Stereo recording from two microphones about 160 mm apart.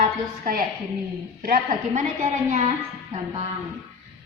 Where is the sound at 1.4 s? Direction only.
60° right (ahead or behind).